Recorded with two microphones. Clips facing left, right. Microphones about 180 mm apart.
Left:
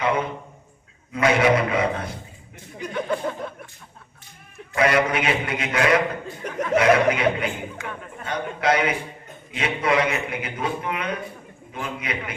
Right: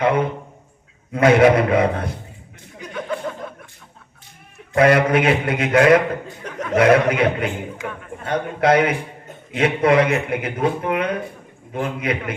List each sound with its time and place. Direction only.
0.0 s a man's voice: 55° right (ahead or behind)
4.7 s a man's voice: 50° right (ahead or behind)